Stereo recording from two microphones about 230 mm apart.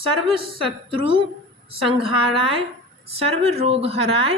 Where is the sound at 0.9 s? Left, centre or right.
Right.